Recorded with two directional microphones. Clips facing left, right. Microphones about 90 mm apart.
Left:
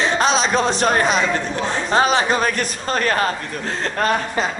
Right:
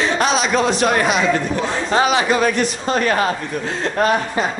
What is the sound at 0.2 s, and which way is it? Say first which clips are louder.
Speech: right 1 dB; 35° left (ahead or behind).